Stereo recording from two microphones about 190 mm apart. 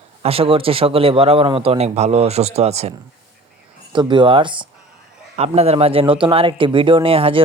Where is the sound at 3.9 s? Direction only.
25° right (ahead or behind).